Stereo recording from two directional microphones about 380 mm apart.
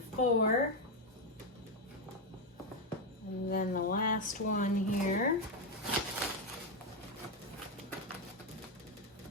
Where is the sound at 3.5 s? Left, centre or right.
Left.